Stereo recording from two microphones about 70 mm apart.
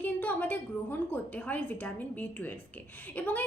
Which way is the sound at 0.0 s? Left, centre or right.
Left.